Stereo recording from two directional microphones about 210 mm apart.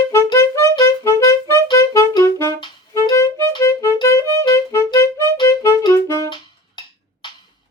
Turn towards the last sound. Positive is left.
turn(degrees=20)  # may be behind; listen again after turning